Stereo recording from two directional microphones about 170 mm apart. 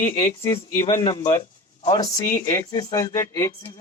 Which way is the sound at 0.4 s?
15° left (ahead or behind).